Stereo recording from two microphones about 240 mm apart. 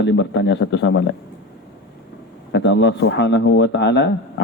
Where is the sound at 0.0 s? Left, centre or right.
Left.